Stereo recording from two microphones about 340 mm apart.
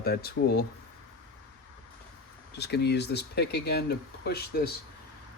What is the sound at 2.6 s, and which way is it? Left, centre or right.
Speech, left.